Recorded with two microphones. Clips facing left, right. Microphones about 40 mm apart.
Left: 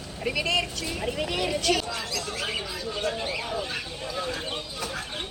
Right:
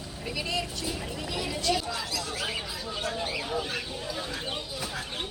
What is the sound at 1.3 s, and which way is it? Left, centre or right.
Speech, left.